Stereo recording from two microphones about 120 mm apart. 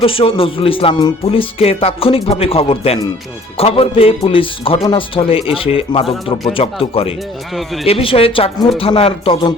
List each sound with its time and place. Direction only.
0.0 s speech: 50° left (ahead or behind)